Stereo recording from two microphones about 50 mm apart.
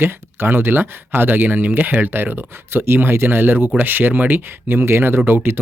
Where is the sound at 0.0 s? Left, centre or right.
Right.